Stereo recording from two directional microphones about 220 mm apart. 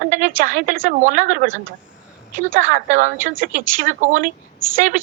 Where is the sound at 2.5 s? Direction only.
35° right (ahead or behind).